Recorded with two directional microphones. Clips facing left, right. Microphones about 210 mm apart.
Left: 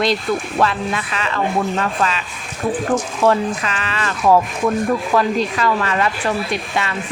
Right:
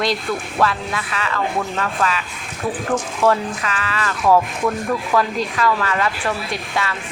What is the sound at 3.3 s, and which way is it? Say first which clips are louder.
Speech: left 2 dB; 25° left (ahead or behind).